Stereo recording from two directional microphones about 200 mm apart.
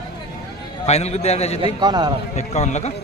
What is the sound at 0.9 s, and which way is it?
Speech, 35° left (ahead or behind).